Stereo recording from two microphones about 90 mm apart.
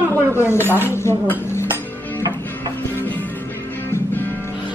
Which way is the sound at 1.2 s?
25° left (ahead or behind).